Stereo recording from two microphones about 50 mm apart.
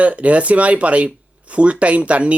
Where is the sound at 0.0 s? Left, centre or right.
Right.